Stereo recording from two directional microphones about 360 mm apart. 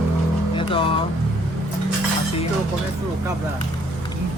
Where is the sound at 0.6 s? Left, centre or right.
Centre.